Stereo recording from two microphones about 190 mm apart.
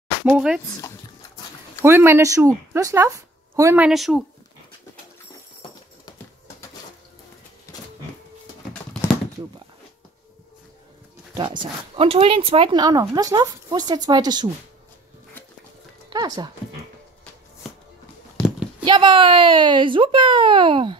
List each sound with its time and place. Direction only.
0.3 s speech: 5° right (ahead or behind)
0.7 s speech: 20° left (ahead or behind)
1.8 s a woman's voice: 10° right (ahead or behind)
11.3 s speech: 25° right (ahead or behind)
16.1 s music: 20° right (ahead or behind)
18.4 s a sound: 5° right (ahead or behind)
18.9 s speech: 25° right (ahead or behind)